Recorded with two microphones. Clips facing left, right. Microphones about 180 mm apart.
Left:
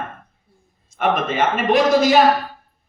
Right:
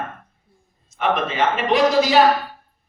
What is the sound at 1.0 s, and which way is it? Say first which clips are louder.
A man's voice: left 1 dB; 50° left (ahead or behind).